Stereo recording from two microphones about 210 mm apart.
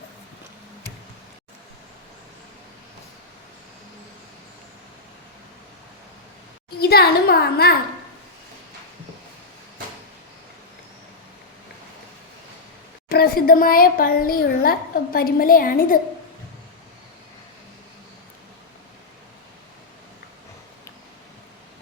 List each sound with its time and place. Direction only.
6.7 s speech: 45° left (ahead or behind)
13.1 s speech: 45° left (ahead or behind)